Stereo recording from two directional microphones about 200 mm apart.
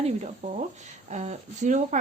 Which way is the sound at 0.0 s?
35° right (ahead or behind).